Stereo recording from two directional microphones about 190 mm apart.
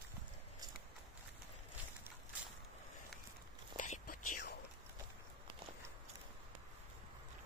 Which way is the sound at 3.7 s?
40° left (ahead or behind).